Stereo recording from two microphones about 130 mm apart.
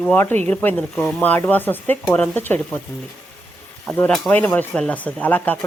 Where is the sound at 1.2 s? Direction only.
15° left (ahead or behind).